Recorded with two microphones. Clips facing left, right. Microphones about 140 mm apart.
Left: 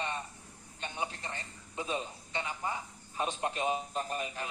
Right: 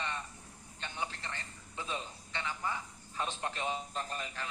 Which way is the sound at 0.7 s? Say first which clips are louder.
Left 3 dB; 20° left (ahead or behind).